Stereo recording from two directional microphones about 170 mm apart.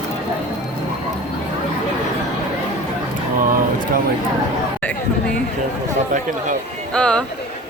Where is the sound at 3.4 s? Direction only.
55° right (ahead or behind).